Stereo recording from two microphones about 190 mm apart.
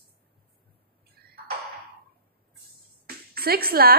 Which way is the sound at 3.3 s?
55° right (ahead or behind).